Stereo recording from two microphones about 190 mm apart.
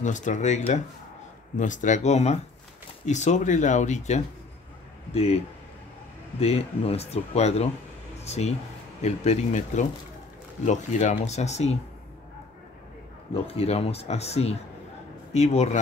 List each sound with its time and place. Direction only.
0.0 s speech: 40° left (ahead or behind)
6.4 s speech: 30° left (ahead or behind)
13.3 s speech: 30° left (ahead or behind)